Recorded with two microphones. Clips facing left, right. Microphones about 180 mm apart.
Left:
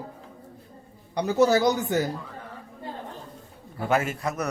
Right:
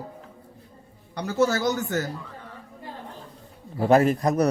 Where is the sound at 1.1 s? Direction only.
15° left (ahead or behind).